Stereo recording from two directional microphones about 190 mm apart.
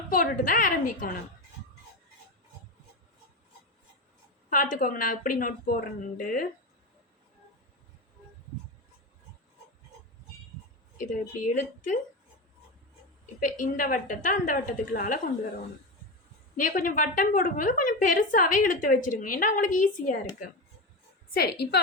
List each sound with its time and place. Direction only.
0.1 s a woman's voice: 45° left (ahead or behind)
4.4 s a woman's voice: 45° left (ahead or behind)
10.9 s speech: 40° left (ahead or behind)
13.4 s a woman's voice: 45° left (ahead or behind)
16.6 s a woman's voice: 45° left (ahead or behind)
21.2 s a woman's voice: 55° left (ahead or behind)